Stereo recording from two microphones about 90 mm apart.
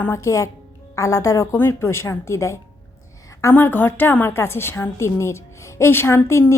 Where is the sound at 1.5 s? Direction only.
30° left (ahead or behind).